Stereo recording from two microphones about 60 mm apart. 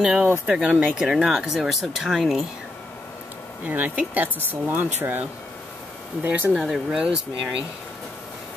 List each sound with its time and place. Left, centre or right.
0.0 s speech: centre
0.5 s speech: right
0.9 s speech: centre
3.6 s speech: right
6.2 s speech: right
6.5 s speech: centre